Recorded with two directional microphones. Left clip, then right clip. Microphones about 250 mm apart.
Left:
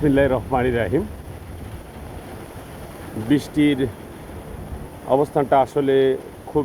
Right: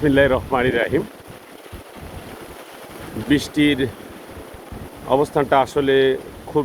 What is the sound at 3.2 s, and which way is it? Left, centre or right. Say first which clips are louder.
Speech: right 1 dB; centre.